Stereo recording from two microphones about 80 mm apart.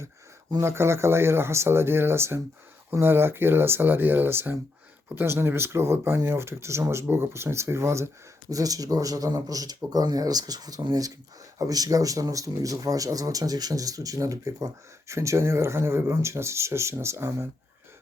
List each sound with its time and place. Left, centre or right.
0.6 s speech: right
8.4 s speech: right